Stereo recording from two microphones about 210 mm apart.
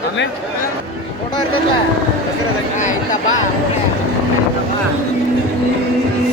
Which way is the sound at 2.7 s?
35° left (ahead or behind).